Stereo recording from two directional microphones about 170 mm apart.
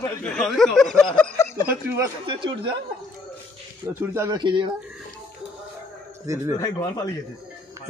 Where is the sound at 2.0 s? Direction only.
30° right (ahead or behind).